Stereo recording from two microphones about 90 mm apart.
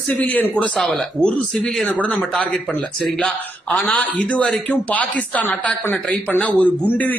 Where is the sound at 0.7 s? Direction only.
5° left (ahead or behind).